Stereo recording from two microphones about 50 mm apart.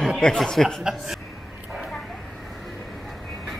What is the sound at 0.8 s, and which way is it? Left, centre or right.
Speech, centre.